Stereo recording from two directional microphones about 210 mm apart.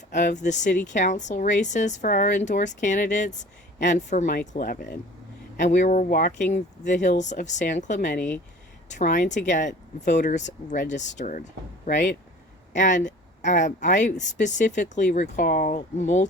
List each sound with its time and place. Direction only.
0.1 s speech: 35° left (ahead or behind)